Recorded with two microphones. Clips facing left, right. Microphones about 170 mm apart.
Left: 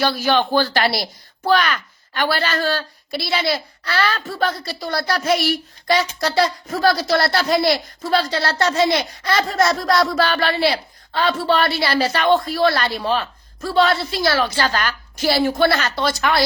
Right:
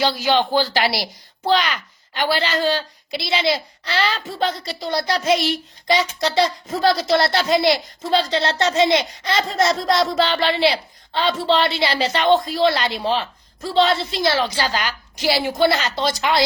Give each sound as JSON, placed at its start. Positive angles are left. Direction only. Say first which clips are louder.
{"t": 0.0, "sound": "a woman's voice", "louder": "even", "side_deg": -15}